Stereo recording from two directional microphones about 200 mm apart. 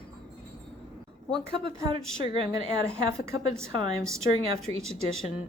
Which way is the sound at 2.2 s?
25° right (ahead or behind).